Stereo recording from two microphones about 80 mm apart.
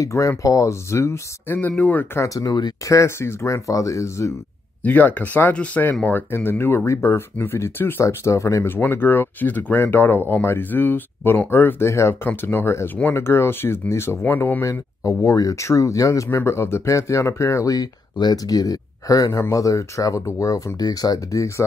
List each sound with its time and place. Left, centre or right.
0.0 s speech: left
1.6 s speech: left
2.1 s speech: left
4.8 s speech: left
8.6 s speech: left
14.7 s speech: left
18.1 s speech: left